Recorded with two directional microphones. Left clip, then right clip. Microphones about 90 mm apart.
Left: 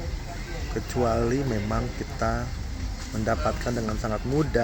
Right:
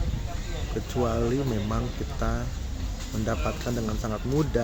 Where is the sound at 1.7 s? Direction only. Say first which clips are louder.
Left 2 dB; 15° right (ahead or behind).